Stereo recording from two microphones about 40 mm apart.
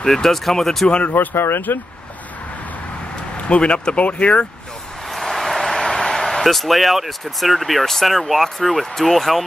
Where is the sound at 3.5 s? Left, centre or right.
Left.